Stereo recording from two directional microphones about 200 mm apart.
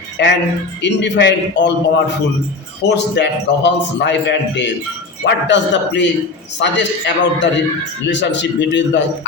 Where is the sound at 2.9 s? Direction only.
60° left (ahead or behind).